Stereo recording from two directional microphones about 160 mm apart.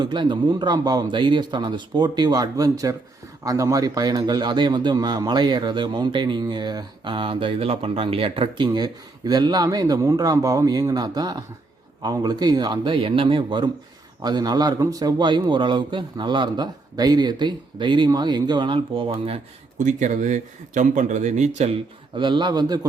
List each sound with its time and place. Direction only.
0.0 s a man's voice: 30° right (ahead or behind)
19.8 s speech: 50° right (ahead or behind); by 22.9 s 25° right (ahead or behind)